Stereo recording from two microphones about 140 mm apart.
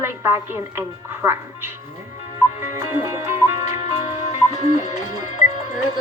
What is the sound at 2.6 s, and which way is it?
Music, 20° right (ahead or behind).